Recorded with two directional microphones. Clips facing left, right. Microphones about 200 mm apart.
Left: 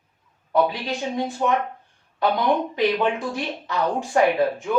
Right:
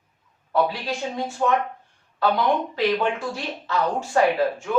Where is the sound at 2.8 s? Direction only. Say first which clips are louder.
Left 1 dB; 20° left (ahead or behind).